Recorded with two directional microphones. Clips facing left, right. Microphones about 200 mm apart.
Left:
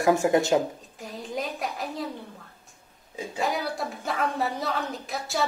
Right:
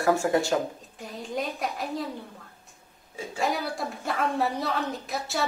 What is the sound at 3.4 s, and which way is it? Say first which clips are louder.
A woman's voice: even; centre (ahead or behind).